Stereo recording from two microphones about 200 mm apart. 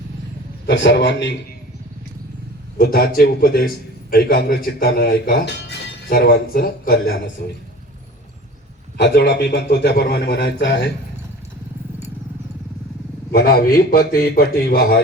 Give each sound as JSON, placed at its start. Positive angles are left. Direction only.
{"t": 0.7, "sound": "a man's voice", "side_deg": 60}
{"t": 2.7, "sound": "a man's voice", "side_deg": 50}
{"t": 9.0, "sound": "a man's voice", "side_deg": 55}
{"t": 13.3, "sound": "speech", "side_deg": 50}